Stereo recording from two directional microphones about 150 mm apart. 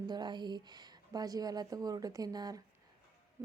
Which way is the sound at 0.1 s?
30° right (ahead or behind).